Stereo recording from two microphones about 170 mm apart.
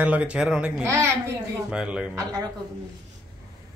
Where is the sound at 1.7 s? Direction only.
5° right (ahead or behind).